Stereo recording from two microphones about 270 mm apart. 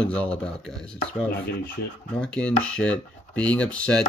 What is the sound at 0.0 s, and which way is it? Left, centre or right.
Speech, centre.